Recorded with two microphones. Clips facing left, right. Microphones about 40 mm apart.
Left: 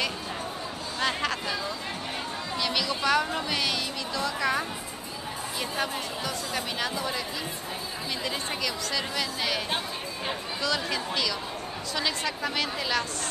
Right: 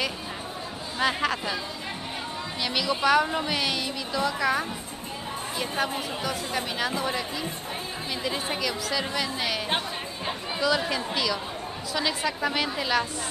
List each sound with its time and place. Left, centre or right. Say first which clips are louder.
0.9 s a sound: right 3 dB; centre
2.6 s speech: right 3 dB; centre
7.0 s speech: right 2 dB; centre
10.6 s speech: right 5 dB; centre